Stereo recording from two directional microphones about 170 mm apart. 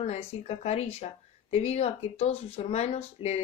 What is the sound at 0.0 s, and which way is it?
A woman's voice, 40° left (ahead or behind).